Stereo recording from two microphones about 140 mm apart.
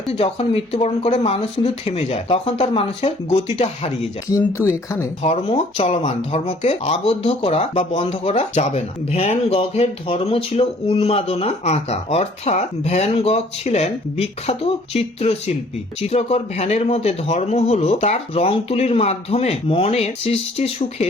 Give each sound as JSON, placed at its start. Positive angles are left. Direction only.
{"t": 0.1, "sound": "speech", "side_deg": 45}
{"t": 4.3, "sound": "speech", "side_deg": 20}
{"t": 5.2, "sound": "speech", "side_deg": 50}